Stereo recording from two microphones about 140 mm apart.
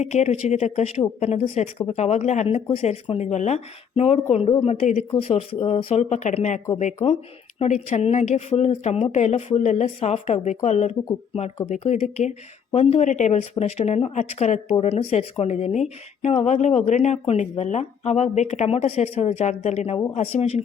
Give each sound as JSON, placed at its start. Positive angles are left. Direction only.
{"t": 0.0, "sound": "speech", "side_deg": 50}
{"t": 12.7, "sound": "speech", "side_deg": 50}